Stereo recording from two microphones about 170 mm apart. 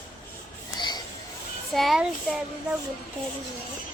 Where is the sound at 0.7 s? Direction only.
25° left (ahead or behind).